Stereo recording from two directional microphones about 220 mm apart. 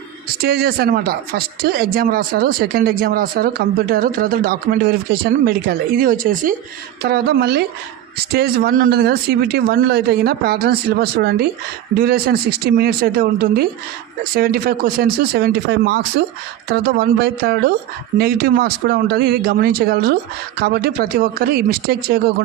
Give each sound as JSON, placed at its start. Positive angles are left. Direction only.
{"t": 0.4, "sound": "speech", "side_deg": -45}